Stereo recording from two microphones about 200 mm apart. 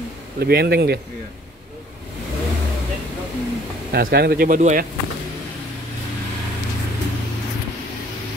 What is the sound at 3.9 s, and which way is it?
Speech, 50° right (ahead or behind).